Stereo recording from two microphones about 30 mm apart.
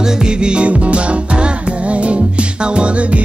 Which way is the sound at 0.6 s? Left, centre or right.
Right.